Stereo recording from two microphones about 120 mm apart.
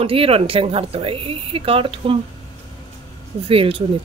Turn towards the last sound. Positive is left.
turn(degrees=-50)  # may be behind; listen again after turning